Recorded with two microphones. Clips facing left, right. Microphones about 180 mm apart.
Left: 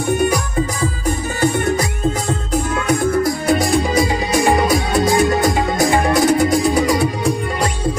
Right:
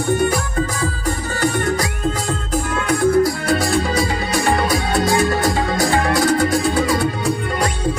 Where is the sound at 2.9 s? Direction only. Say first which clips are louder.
Right 2 dB; 20° left (ahead or behind).